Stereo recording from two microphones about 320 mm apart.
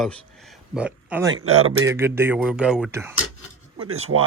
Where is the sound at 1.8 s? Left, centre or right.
Centre.